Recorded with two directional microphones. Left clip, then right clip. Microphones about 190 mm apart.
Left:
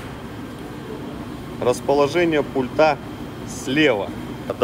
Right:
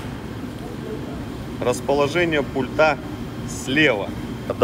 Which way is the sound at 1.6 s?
30° left (ahead or behind).